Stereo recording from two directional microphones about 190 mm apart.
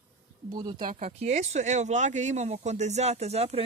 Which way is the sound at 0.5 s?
20° right (ahead or behind).